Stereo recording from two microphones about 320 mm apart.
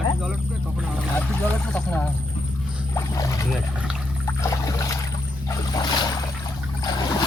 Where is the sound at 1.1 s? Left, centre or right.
Centre.